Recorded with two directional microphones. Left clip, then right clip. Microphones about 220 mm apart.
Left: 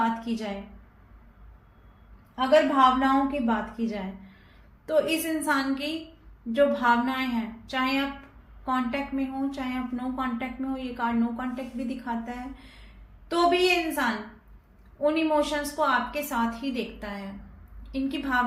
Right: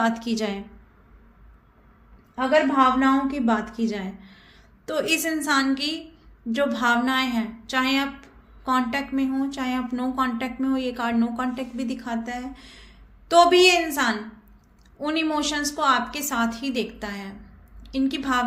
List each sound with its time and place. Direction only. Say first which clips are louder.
0.3 s a woman's voice: right 5 dB; 55° right (ahead or behind)
2.3 s a woman's voice: right 1 dB; 55° right (ahead or behind)
15.0 s a woman's voice: left 1 dB; 50° right (ahead or behind)